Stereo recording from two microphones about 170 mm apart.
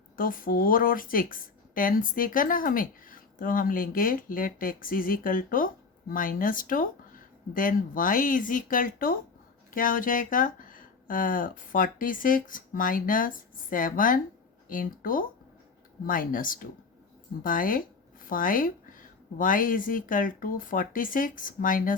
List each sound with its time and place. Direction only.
0.2 s speech: 55° left (ahead or behind)